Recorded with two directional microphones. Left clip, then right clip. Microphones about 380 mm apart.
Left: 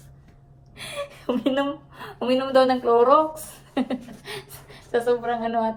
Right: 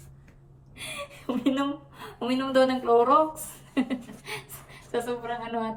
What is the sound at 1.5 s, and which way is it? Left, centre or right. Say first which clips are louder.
A woman's voice: left 2 dB; centre.